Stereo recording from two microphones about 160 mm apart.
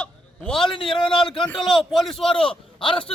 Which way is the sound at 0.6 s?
30° left (ahead or behind).